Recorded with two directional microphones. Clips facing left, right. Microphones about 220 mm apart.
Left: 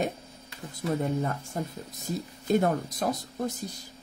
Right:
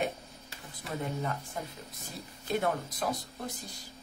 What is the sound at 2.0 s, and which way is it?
A woman's voice, 40° left (ahead or behind).